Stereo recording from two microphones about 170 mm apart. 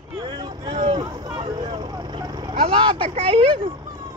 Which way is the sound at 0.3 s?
25° right (ahead or behind).